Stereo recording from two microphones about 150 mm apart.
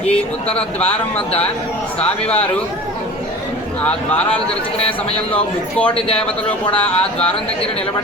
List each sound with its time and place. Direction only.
0.0 s a man's voice: 40° left (ahead or behind)
3.8 s a man's voice: 10° left (ahead or behind)
5.3 s a man's voice: 10° left (ahead or behind)